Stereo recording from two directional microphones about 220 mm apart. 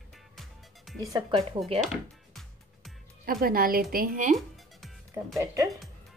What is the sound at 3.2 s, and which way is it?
A woman's voice, 40° right (ahead or behind).